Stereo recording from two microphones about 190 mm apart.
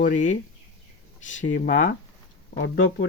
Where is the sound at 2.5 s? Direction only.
75° left (ahead or behind).